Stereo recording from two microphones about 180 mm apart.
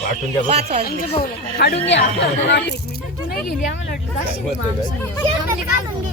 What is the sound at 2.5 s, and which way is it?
Speech, 70° left (ahead or behind).